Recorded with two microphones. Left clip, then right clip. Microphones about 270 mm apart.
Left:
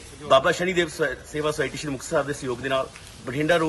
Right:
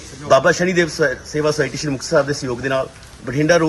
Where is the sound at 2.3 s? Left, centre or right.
Centre.